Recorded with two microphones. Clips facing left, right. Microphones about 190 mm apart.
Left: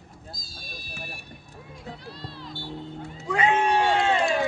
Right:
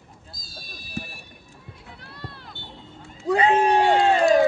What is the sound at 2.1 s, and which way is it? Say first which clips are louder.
Music: left 2 dB; 60° right (ahead or behind).